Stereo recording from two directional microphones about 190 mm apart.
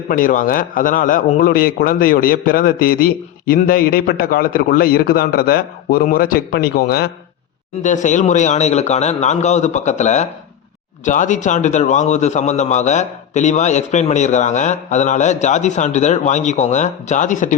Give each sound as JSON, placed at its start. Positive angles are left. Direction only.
{"t": 0.1, "sound": "a man's voice", "side_deg": 45}
{"t": 7.8, "sound": "a man's voice", "side_deg": 40}